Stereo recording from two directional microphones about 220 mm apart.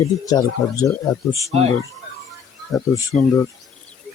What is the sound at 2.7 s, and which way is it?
Speech, 15° left (ahead or behind).